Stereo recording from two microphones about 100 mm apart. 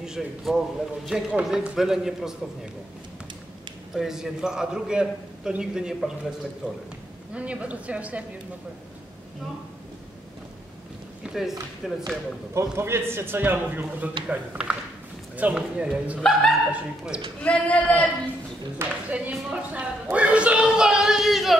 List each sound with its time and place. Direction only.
0.0 s a man's voice: 5° right (ahead or behind)
3.9 s a man's voice: 5° right (ahead or behind)
7.3 s speech: 15° right (ahead or behind)
11.2 s a man's voice: 5° right (ahead or behind)
12.5 s a man's voice: 25° right (ahead or behind); by 16.2 s 10° right (ahead or behind)
16.2 s a man's voice: 5° left (ahead or behind)
16.7 s speech: 10° right (ahead or behind)
17.4 s speech: 15° left (ahead or behind)
18.8 s speech: 15° right (ahead or behind)